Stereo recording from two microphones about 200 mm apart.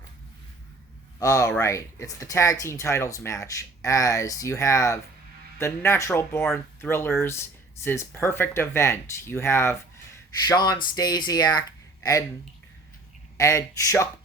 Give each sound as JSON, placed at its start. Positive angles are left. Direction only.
{"t": 1.2, "sound": "speech", "side_deg": 15}
{"t": 13.3, "sound": "speech", "side_deg": 15}